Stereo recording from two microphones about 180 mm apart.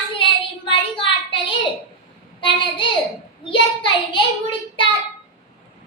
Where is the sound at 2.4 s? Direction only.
30° left (ahead or behind).